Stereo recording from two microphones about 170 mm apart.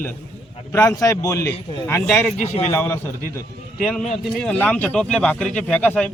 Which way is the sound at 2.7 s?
10° left (ahead or behind).